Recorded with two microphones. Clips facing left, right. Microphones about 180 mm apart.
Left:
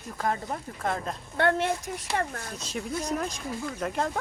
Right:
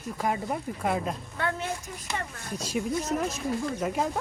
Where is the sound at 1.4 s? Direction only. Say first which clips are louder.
Left 7 dB; 70° left (ahead or behind).